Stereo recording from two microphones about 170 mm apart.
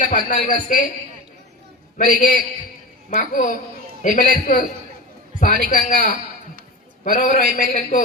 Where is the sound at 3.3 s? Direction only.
55° left (ahead or behind).